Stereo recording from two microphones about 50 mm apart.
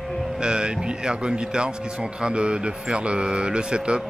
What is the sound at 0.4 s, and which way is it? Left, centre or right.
A man's voice, centre.